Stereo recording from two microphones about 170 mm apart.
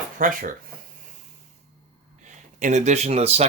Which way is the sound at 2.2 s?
45° right (ahead or behind).